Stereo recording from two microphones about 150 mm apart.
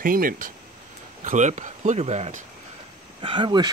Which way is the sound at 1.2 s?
55° right (ahead or behind).